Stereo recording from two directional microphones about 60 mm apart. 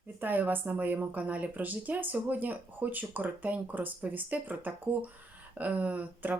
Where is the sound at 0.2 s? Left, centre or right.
Right.